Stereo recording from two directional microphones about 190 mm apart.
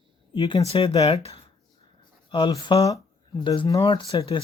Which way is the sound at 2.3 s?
25° left (ahead or behind).